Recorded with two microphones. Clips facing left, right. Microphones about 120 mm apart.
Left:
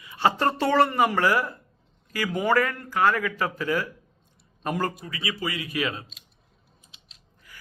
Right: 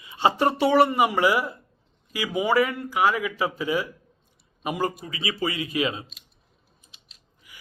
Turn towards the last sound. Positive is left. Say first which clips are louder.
# left 2 dB
turn(degrees=-15)  # may be behind; listen again after turning